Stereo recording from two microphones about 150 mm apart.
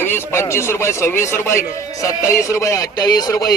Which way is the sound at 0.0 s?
15° left (ahead or behind).